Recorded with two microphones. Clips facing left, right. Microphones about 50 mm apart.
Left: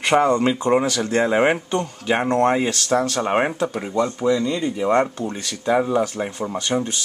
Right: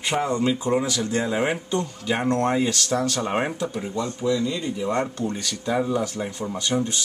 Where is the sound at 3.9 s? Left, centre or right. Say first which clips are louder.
Left 5 dB; left.